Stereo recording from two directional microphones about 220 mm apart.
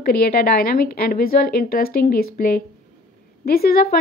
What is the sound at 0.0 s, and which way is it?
A woman's voice, 45° left (ahead or behind).